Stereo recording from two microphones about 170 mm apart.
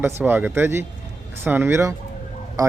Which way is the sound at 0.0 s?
10° right (ahead or behind).